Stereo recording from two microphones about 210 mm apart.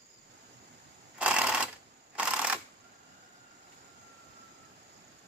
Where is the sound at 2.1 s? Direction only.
5° right (ahead or behind).